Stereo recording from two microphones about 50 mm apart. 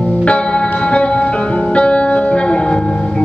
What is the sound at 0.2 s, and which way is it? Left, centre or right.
Music, left.